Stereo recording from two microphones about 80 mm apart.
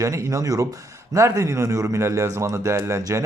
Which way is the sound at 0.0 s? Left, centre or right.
Right.